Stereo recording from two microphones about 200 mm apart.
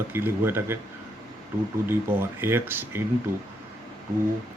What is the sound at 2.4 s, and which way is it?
Speech, 10° right (ahead or behind).